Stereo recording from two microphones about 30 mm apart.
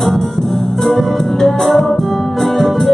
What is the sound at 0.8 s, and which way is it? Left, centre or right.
Music, centre.